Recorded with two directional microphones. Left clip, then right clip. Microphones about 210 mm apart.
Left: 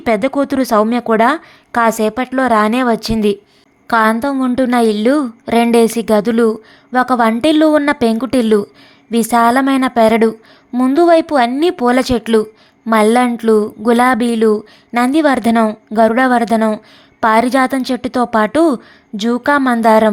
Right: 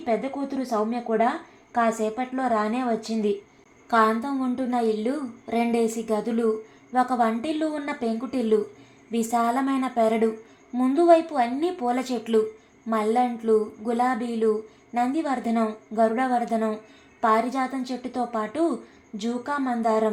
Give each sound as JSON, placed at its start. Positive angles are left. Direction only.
{"t": 0.0, "sound": "a woman's voice", "side_deg": 50}